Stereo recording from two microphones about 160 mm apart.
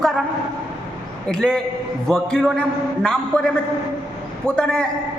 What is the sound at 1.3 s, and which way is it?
A man's voice, 5° left (ahead or behind).